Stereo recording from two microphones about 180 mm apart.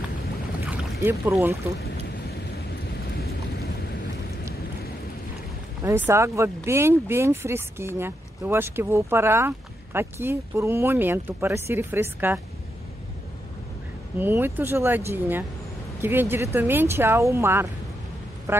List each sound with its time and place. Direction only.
0.7 s boat: 10° right (ahead or behind)
3.2 s vehicle: 60° left (ahead or behind)
5.9 s speech: 15° right (ahead or behind)
14.1 s speech: 10° right (ahead or behind)